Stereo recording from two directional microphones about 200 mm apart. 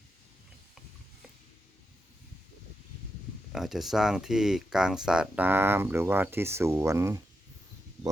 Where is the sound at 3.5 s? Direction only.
Centre (ahead or behind).